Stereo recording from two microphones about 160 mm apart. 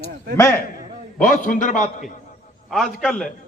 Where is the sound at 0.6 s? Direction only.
60° left (ahead or behind).